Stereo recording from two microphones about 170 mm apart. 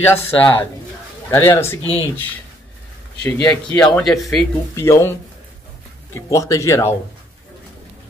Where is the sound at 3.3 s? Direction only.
10° left (ahead or behind).